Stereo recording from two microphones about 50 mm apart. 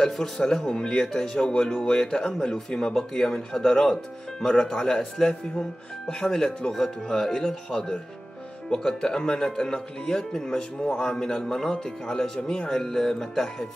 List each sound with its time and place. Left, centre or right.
0.0 s speech: centre